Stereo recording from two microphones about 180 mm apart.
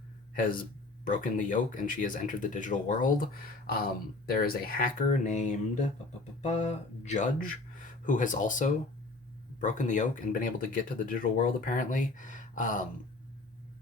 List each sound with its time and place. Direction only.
0.3 s speech: 50° left (ahead or behind)
4.3 s speech: 55° left (ahead or behind)